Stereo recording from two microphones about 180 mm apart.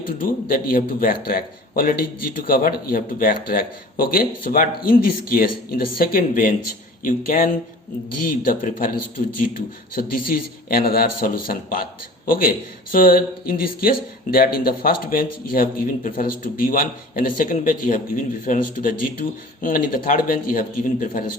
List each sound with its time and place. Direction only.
0.2 s speech: 50° left (ahead or behind)
8.6 s a man's voice: 50° left (ahead or behind)